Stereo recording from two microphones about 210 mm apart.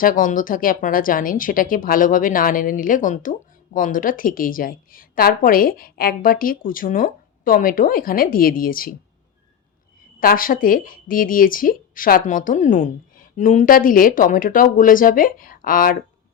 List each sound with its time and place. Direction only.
0.0 s a woman's voice: 40° left (ahead or behind)
10.2 s a woman's voice: 40° left (ahead or behind)